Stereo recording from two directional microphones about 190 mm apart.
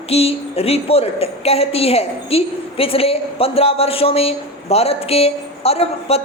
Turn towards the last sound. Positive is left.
turn(degrees=30)  # may be behind; listen again after turning